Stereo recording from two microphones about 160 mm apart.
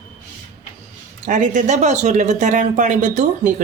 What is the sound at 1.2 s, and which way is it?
Speech, 50° right (ahead or behind).